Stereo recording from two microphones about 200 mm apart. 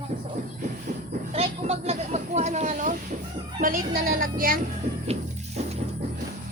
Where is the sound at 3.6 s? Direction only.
45° right (ahead or behind).